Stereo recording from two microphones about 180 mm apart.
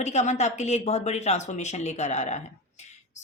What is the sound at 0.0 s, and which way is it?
A woman's voice, 40° left (ahead or behind).